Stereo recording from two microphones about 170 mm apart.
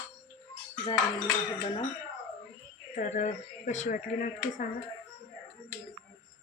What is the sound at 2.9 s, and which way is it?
Speech, 45° left (ahead or behind).